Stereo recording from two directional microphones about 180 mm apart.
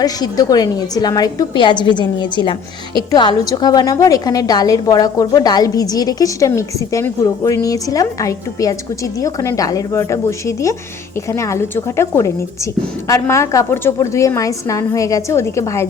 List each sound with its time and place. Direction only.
0.0 s a woman's voice: 20° left (ahead or behind)